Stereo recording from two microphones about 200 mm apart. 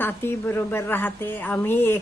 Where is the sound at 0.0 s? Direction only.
10° left (ahead or behind).